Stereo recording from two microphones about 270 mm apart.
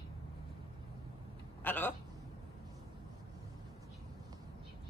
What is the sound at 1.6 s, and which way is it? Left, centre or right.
Speech, centre.